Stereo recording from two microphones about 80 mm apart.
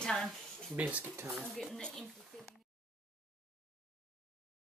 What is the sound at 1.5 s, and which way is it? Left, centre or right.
Speech, centre.